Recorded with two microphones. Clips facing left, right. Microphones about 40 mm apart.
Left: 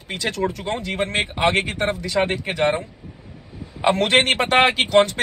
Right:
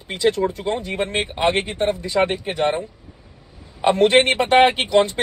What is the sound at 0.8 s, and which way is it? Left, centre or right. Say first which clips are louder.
Speech: even; left.